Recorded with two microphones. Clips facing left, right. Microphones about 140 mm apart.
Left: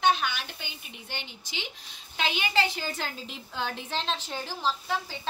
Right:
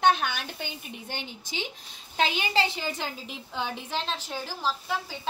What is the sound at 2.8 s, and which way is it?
A woman's voice, 15° right (ahead or behind).